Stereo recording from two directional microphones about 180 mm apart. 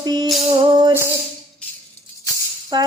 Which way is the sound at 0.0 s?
25° right (ahead or behind).